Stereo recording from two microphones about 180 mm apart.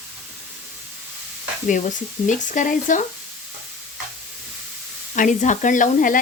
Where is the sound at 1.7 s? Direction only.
45° left (ahead or behind).